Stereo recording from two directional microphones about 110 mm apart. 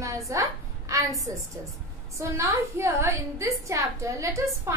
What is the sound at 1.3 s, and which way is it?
A woman's voice, 30° right (ahead or behind).